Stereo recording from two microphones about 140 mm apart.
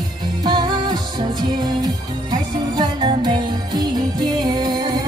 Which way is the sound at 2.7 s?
30° right (ahead or behind).